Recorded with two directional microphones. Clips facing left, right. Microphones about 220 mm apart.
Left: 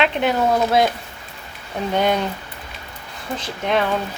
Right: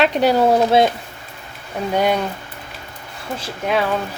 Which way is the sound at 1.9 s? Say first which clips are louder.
Right 1 dB; 10° right (ahead or behind).